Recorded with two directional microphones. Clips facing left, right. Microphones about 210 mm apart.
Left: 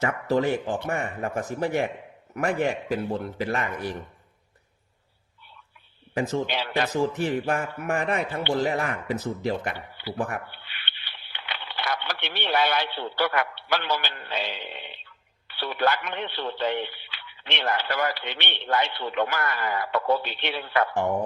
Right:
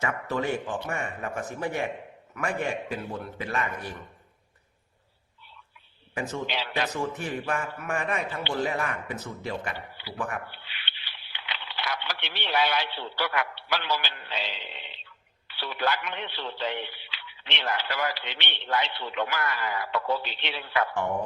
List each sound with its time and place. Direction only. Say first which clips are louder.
0.0 s speech: left 5 dB; 35° left (ahead or behind)
6.1 s speech: left 6 dB; 40° left (ahead or behind)
6.5 s speech: left 3 dB; 50° left (ahead or behind)
7.2 s speech: left 5 dB; 35° left (ahead or behind)
9.7 s speech: left 5 dB; 60° left (ahead or behind)
10.2 s speech: left 1 dB; 45° left (ahead or behind)